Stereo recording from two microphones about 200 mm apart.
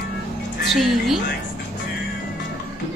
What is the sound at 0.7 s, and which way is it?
Speech, centre (ahead or behind).